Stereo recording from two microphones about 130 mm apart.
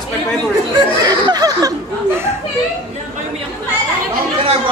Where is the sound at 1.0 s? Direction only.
30° right (ahead or behind).